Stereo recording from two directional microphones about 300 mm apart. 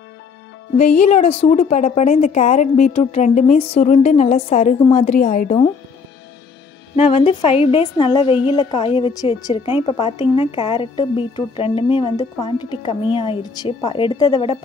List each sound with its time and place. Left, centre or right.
0.7 s a woman's voice: left
7.0 s a woman's voice: centre